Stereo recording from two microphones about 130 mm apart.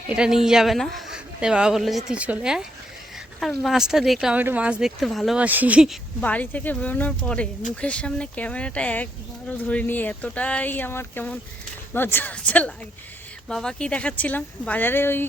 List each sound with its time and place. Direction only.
0.1 s a woman's voice: 5° right (ahead or behind)
5.4 s speech: 10° right (ahead or behind)
6.2 s speech: 10° left (ahead or behind)